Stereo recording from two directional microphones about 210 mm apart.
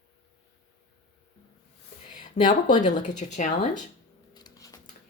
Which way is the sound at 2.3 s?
35° left (ahead or behind).